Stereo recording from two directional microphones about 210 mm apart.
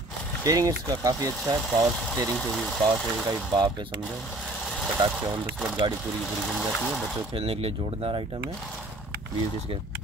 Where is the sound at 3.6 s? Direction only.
20° right (ahead or behind).